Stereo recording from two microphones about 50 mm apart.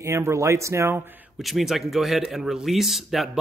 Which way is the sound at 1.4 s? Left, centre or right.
Centre.